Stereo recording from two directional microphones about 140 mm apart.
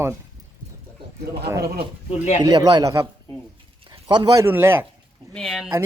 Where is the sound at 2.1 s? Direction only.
55° left (ahead or behind).